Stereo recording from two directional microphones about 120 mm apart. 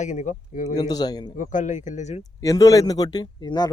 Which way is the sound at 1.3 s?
90° left.